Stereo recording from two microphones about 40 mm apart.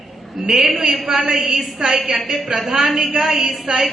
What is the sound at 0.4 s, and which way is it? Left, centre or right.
A man's voice, centre.